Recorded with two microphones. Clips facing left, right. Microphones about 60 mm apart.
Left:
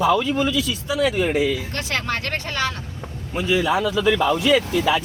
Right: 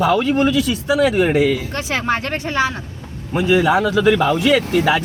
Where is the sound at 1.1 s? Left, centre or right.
Right.